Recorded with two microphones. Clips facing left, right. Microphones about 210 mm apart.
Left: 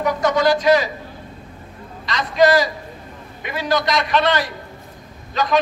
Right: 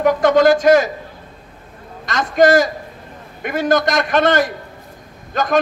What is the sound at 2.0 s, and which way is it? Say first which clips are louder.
A man's voice: right 3 dB; 50° right (ahead or behind).